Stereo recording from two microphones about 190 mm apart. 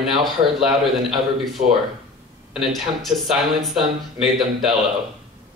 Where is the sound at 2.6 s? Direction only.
Centre (ahead or behind).